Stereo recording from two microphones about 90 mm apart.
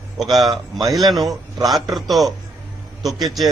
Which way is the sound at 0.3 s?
45° right (ahead or behind).